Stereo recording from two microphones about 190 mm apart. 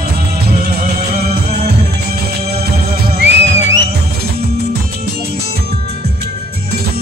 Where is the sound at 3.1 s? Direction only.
65° right (ahead or behind).